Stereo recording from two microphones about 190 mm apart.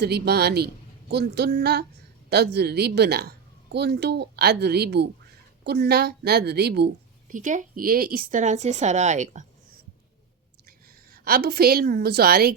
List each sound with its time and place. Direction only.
0.0 s a woman's voice: 60° right (ahead or behind)
7.3 s a woman's voice: 40° right (ahead or behind)
10.7 s a woman's voice: 50° right (ahead or behind)